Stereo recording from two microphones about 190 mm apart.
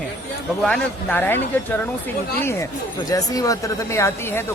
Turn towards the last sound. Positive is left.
turn(degrees=10)  # may be behind; listen again after turning